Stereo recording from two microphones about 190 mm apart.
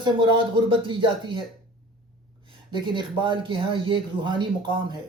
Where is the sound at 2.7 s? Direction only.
25° right (ahead or behind).